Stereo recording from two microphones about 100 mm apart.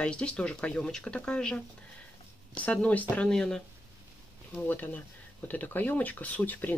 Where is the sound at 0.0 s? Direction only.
10° left (ahead or behind).